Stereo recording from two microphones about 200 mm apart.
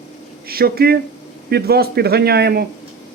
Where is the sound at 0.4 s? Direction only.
50° right (ahead or behind).